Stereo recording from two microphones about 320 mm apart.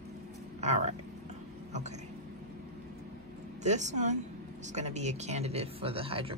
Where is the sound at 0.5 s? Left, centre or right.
Right.